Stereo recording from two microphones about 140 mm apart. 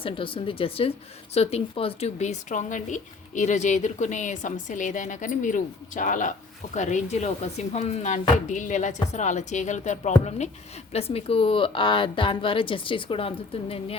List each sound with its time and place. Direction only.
0.0 s a woman's voice: 40° left (ahead or behind)